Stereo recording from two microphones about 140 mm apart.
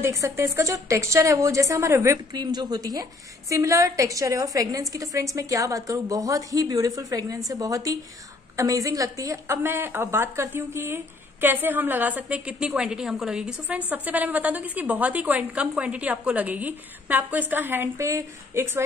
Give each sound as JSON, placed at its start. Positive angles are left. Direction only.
{"t": 0.0, "sound": "a woman's voice", "side_deg": -20}